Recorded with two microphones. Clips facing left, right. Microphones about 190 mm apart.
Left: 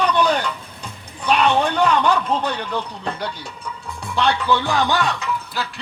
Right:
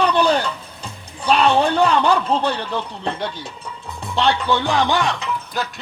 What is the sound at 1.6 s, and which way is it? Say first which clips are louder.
Speech: right 1 dB; 30° right (ahead or behind).